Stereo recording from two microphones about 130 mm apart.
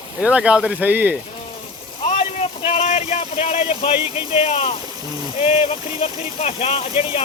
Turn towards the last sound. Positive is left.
turn(degrees=50)  # may be behind; listen again after turning